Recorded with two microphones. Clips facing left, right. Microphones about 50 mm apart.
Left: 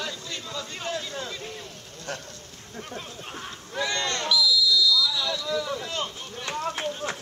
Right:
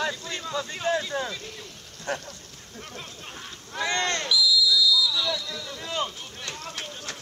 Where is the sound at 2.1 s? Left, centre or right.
Right.